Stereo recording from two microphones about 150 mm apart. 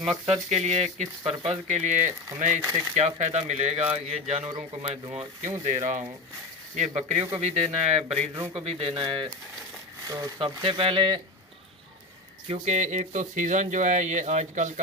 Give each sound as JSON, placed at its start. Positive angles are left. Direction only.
{"t": 0.1, "sound": "speech", "side_deg": -45}
{"t": 2.6, "sound": "speech", "side_deg": -20}
{"t": 3.2, "sound": "speech", "side_deg": -50}
{"t": 5.6, "sound": "speech", "side_deg": -55}
{"t": 12.5, "sound": "speech", "side_deg": -55}